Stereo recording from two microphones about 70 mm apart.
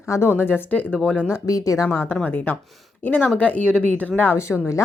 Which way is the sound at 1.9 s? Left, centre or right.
Left.